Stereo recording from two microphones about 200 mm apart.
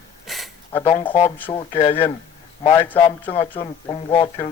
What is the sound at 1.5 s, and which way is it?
Speech, 25° left (ahead or behind).